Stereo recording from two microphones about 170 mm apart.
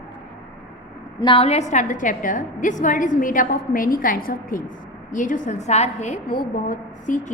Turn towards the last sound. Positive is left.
turn(degrees=45)  # may be behind; listen again after turning